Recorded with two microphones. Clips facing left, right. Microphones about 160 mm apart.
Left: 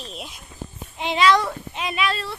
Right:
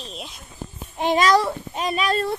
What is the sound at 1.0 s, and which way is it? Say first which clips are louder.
Speech: right 1 dB; 45° right (ahead or behind).